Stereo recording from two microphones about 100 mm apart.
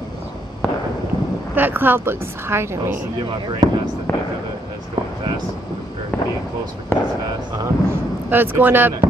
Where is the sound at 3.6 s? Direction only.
40° right (ahead or behind).